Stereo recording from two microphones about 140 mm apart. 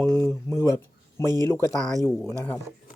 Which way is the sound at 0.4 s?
20° left (ahead or behind).